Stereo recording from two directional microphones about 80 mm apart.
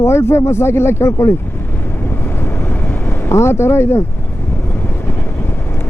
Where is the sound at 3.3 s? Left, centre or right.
Left.